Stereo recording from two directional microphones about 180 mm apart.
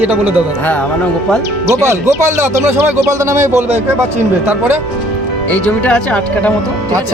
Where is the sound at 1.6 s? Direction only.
15° right (ahead or behind).